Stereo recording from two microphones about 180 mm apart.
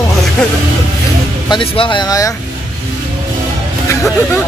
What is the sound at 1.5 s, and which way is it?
Speech, 30° left (ahead or behind).